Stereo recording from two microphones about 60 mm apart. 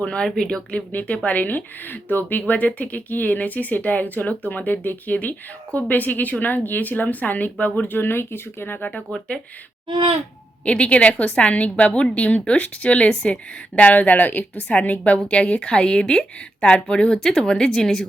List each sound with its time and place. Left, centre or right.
0.0 s a woman's voice: centre
0.9 s a woman's voice: left
10.7 s a woman's voice: centre